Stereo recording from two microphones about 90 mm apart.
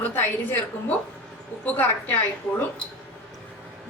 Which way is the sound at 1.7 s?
20° left (ahead or behind).